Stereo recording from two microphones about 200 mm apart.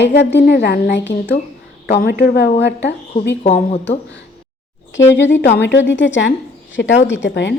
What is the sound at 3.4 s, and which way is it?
Speech, 35° left (ahead or behind).